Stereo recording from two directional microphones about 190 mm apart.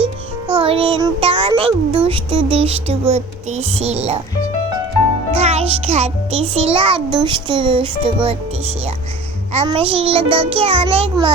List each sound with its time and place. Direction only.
0.0 s music: 10° right (ahead or behind)
0.6 s a child's voice: 30° right (ahead or behind)
5.3 s a child's voice: 30° right (ahead or behind)
9.5 s a child's voice: 30° right (ahead or behind)